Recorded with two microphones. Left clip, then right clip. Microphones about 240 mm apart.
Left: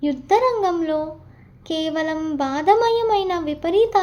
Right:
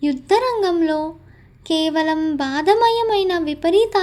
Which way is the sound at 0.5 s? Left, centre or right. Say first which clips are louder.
Right 2 dB; right.